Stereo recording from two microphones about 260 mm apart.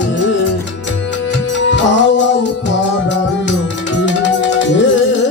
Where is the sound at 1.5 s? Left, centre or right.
Left.